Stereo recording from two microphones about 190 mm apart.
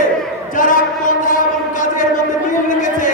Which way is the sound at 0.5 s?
45° left (ahead or behind).